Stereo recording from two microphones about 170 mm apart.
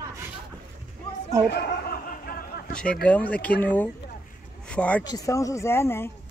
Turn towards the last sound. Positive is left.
turn(degrees=15)  # may be behind; listen again after turning